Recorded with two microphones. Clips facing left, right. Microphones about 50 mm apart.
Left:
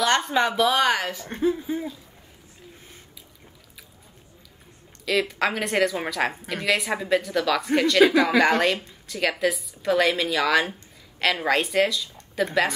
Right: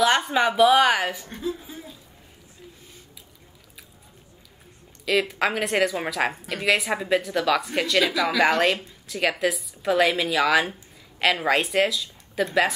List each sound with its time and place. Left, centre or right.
0.0 s speech: centre
1.3 s a woman's voice: left
5.0 s a woman's voice: centre
8.0 s a woman's voice: left
8.4 s a woman's voice: centre